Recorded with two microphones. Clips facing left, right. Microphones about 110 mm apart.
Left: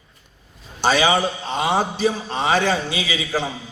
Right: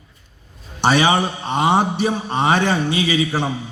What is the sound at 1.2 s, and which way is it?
Speech, 60° right (ahead or behind).